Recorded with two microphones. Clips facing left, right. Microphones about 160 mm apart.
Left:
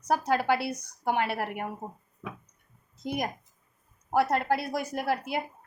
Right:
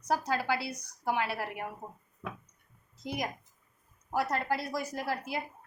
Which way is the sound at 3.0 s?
55° left (ahead or behind).